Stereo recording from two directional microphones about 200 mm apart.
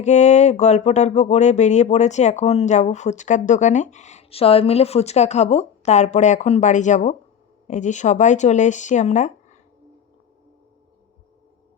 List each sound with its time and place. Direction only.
0.0 s speech: 35° left (ahead or behind)